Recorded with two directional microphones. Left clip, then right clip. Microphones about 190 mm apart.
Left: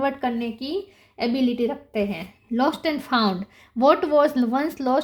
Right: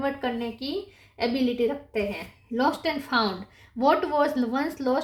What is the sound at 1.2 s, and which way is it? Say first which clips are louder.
Speech: left 2 dB; 50° left (ahead or behind).